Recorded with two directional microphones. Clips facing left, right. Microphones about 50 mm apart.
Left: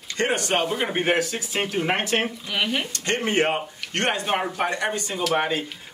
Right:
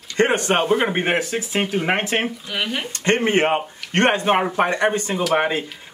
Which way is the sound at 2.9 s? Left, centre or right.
Right.